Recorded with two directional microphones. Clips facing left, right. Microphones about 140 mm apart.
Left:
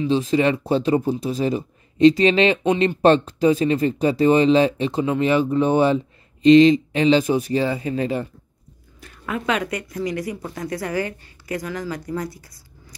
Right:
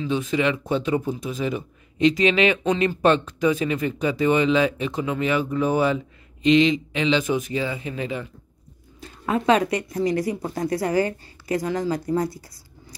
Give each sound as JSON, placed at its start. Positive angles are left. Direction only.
{"t": 0.0, "sound": "speech", "side_deg": 30}
{"t": 9.0, "sound": "a woman's voice", "side_deg": -30}